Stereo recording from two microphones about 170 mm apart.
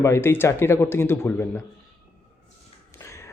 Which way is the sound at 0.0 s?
15° left (ahead or behind).